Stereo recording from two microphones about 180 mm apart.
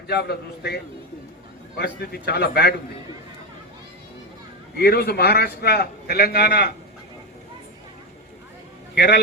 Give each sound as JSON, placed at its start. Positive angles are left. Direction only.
{"t": 0.1, "sound": "a man's voice", "side_deg": 65}
{"t": 4.8, "sound": "a man's voice", "side_deg": 60}
{"t": 9.0, "sound": "a man's voice", "side_deg": 65}